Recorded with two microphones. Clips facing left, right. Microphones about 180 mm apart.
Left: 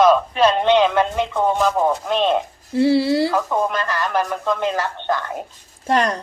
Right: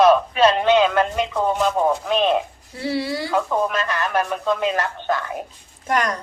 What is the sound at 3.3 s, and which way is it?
Speech, centre (ahead or behind).